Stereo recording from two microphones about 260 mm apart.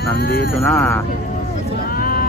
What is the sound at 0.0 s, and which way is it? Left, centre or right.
Speech, left.